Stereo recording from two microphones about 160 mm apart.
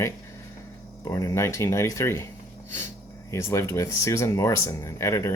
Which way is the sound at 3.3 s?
20° left (ahead or behind).